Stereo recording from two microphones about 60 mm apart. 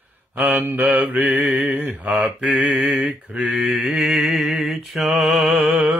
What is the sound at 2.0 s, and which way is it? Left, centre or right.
Mantra, right.